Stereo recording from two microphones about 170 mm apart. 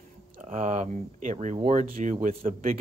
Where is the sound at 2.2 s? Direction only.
55° right (ahead or behind).